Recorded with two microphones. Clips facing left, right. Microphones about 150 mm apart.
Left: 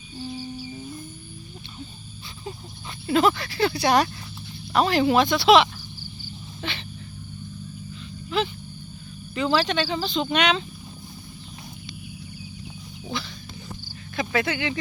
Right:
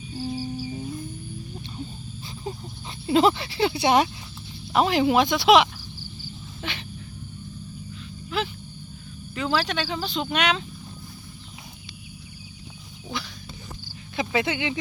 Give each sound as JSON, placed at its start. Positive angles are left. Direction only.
{"t": 3.1, "sound": "speech", "side_deg": -25}
{"t": 8.3, "sound": "speech", "side_deg": -5}
{"t": 14.2, "sound": "speech", "side_deg": -20}